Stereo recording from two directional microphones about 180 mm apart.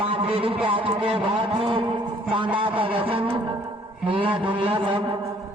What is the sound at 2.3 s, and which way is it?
Vehicle, 30° right (ahead or behind).